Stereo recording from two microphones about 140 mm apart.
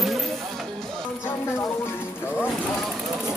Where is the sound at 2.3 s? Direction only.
5° right (ahead or behind).